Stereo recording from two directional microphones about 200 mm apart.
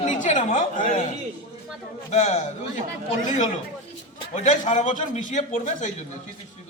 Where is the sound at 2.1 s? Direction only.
35° left (ahead or behind).